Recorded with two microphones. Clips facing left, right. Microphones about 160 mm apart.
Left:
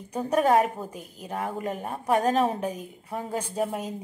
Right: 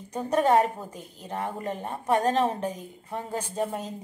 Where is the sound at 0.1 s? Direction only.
10° left (ahead or behind).